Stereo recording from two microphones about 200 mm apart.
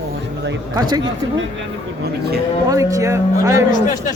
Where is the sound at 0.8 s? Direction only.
20° right (ahead or behind).